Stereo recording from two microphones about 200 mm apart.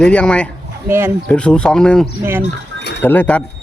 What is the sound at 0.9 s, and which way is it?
Speech, 10° right (ahead or behind).